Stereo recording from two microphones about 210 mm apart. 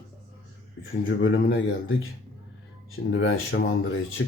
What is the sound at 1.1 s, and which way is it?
Speech, 45° left (ahead or behind).